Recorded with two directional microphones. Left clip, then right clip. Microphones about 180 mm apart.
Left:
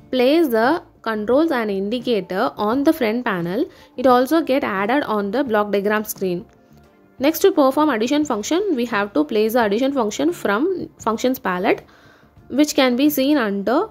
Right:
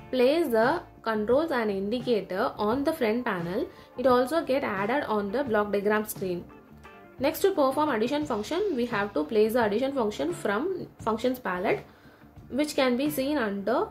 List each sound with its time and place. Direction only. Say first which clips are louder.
0.1 s a woman's voice: left 7 dB; 45° left (ahead or behind)